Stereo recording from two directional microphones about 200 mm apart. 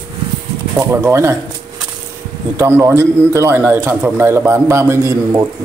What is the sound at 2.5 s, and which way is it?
A man's voice, 15° right (ahead or behind).